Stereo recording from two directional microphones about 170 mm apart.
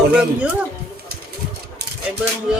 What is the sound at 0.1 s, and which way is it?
Speech, 5° right (ahead or behind).